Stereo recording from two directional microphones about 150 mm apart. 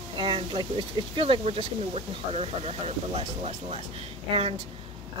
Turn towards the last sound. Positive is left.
turn(degrees=-40)  # may be behind; listen again after turning